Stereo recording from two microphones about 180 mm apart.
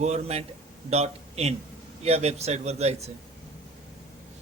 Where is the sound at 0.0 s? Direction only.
35° right (ahead or behind).